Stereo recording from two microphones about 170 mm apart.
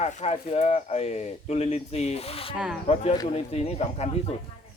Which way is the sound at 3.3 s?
40° left (ahead or behind).